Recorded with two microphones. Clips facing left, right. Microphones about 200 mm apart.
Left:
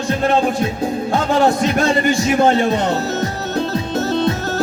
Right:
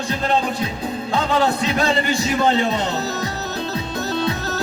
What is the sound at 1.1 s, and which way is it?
Music, 55° left (ahead or behind).